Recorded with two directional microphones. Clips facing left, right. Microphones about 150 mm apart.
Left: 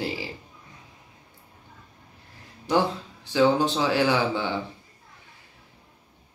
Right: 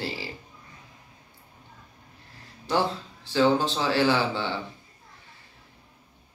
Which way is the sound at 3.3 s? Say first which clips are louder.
Left 1 dB; 15° left (ahead or behind).